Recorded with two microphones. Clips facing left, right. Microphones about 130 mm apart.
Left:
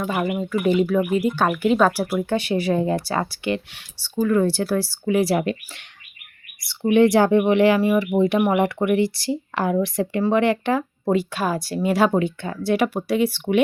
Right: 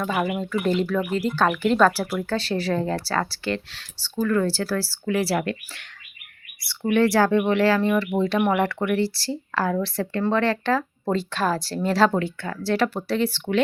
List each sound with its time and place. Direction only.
0.0 s speech: 10° left (ahead or behind)